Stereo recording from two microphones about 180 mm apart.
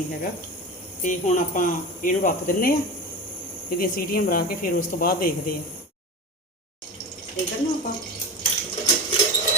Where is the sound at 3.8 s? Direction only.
55° left (ahead or behind).